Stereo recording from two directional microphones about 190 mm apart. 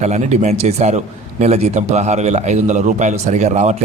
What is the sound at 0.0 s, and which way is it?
A man's voice, 35° right (ahead or behind).